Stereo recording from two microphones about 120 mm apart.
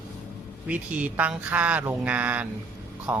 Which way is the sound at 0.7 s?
10° right (ahead or behind).